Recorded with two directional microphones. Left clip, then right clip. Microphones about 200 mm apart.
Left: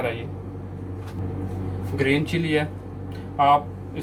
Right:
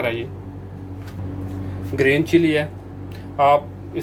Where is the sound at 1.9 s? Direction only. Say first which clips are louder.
Right 7 dB; 55° right (ahead or behind).